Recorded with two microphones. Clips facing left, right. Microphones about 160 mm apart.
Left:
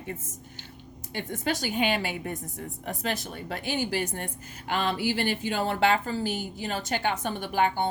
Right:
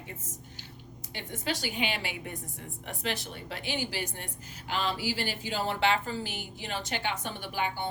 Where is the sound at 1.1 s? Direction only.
50° left (ahead or behind).